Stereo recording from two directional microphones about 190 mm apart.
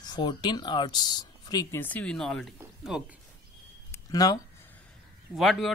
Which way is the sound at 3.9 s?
20° left (ahead or behind).